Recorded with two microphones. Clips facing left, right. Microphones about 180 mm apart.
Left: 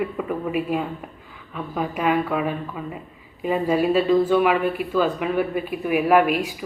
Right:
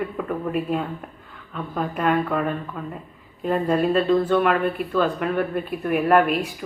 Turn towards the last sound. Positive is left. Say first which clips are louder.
# left 1 dB
turn(degrees=0)  # may be behind; listen again after turning